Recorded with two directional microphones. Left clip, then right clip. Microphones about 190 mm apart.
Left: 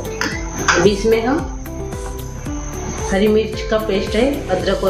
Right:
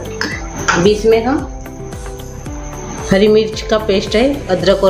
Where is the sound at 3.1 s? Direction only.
50° right (ahead or behind).